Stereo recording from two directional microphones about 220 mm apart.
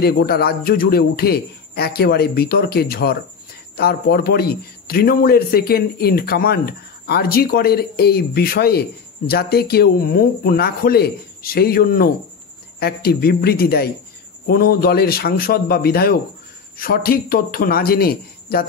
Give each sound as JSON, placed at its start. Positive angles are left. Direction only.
{"t": 0.0, "sound": "a man's voice", "side_deg": 45}